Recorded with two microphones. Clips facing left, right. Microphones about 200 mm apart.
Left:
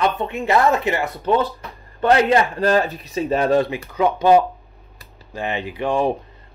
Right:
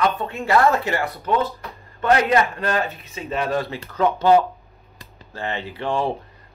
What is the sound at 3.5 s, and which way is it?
Speech, 15° left (ahead or behind).